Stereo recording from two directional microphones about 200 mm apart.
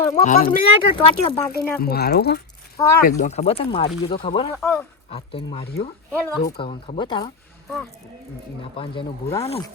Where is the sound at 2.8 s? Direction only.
15° left (ahead or behind).